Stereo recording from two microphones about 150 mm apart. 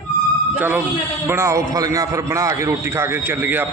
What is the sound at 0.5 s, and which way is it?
A man's voice, 10° right (ahead or behind).